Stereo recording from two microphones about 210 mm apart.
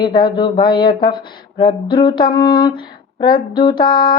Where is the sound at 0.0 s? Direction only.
20° left (ahead or behind).